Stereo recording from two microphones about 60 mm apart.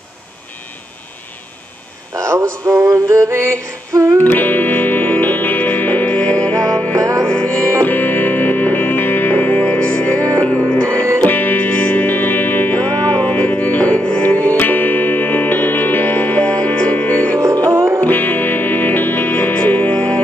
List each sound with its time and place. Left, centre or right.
2.1 s music: right
4.2 s music: left
7.0 s music: right
7.2 s music: centre
7.8 s music: left
11.2 s music: left
17.6 s music: right
18.0 s music: left